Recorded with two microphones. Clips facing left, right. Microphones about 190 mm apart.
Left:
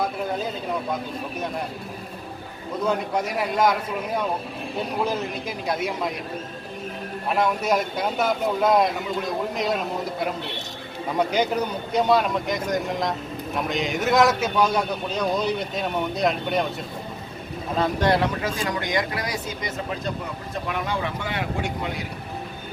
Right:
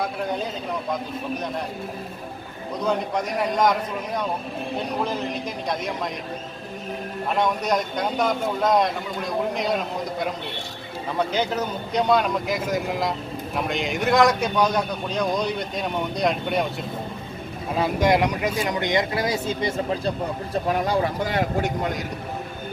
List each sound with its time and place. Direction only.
2.8 s speech: 5° left (ahead or behind)
5.0 s a man's voice: 5° left (ahead or behind)
7.3 s speech: 5° left (ahead or behind)
11.2 s speech: 10° left (ahead or behind)
17.7 s speech: 10° right (ahead or behind); by 21.9 s 40° right (ahead or behind)